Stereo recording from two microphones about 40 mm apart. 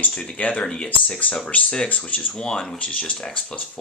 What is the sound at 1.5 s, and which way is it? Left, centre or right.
Speech, left.